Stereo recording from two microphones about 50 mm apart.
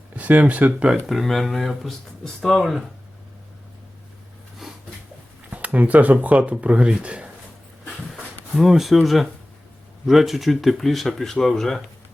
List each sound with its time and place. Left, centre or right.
0.2 s speech: right
1.0 s speech: centre
4.6 s a sound: centre
5.5 s speech: right
8.5 s speech: centre